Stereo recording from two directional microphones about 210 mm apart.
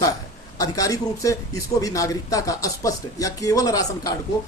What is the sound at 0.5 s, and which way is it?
Speech, 15° left (ahead or behind).